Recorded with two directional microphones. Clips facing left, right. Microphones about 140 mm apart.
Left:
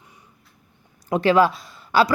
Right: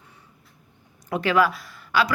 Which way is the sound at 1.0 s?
30° left (ahead or behind).